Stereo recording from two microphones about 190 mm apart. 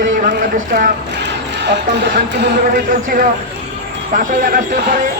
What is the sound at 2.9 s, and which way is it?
Speech, 45° right (ahead or behind).